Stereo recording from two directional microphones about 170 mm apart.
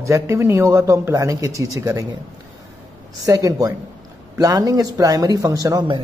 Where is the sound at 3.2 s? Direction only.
20° right (ahead or behind).